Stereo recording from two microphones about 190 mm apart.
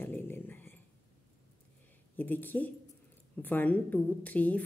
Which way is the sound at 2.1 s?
10° left (ahead or behind).